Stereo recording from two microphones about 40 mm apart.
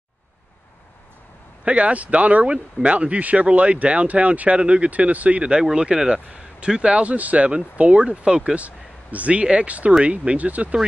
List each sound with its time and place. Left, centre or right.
1.6 s speech: right
5.6 s speech: centre
8.5 s speech: right